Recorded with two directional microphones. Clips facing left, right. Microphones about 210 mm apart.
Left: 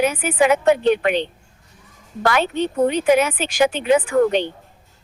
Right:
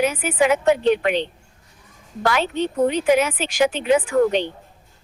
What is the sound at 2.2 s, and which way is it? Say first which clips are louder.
Speech: left 2 dB; 55° left (ahead or behind).